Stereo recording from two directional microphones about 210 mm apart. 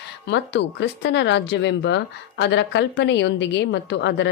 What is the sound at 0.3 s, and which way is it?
Speech, 55° left (ahead or behind).